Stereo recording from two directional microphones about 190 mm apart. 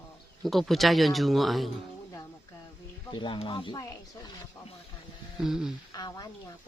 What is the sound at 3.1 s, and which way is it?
Speech, 25° left (ahead or behind).